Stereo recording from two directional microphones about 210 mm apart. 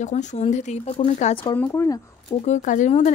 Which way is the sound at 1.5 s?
10° left (ahead or behind).